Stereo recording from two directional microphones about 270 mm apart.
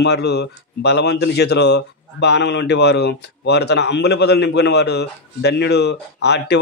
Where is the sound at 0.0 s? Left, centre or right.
Left.